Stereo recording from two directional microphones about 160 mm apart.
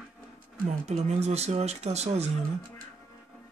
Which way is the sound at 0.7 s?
45° right (ahead or behind).